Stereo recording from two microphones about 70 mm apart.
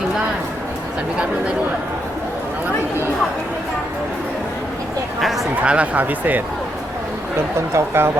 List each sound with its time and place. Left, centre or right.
5.2 s speech: centre
5.5 s speech: centre
7.7 s speech: right